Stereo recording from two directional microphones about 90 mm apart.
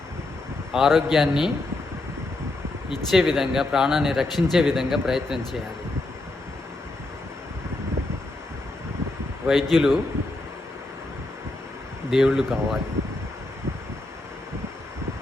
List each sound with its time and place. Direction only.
0.7 s speech: centre (ahead or behind)
3.1 s speech: centre (ahead or behind)
9.5 s speech: 5° right (ahead or behind)
12.1 s speech: 5° right (ahead or behind)